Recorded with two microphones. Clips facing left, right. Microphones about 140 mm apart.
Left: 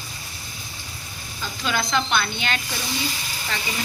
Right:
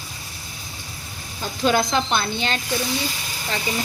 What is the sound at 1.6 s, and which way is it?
Speech, 40° right (ahead or behind).